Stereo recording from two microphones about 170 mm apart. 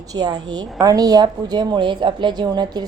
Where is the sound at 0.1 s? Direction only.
25° right (ahead or behind).